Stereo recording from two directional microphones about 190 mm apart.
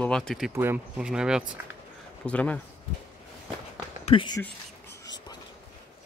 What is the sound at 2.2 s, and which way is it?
Speech, 5° left (ahead or behind).